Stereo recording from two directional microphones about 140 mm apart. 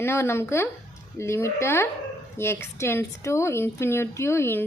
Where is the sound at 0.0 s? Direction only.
20° left (ahead or behind).